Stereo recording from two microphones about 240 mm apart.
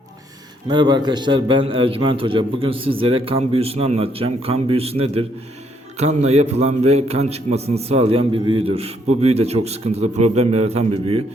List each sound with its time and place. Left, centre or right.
0.7 s a man's voice: centre